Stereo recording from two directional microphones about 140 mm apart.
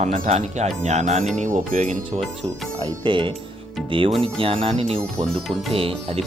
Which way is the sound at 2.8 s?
35° right (ahead or behind).